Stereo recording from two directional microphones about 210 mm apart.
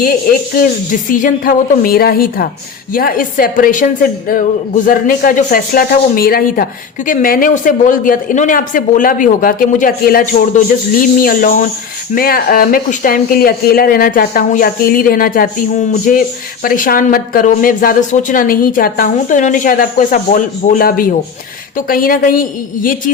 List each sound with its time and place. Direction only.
0.0 s a woman's voice: 45° left (ahead or behind)